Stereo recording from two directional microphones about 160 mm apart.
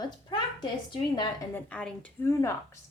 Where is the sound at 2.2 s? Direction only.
20° left (ahead or behind).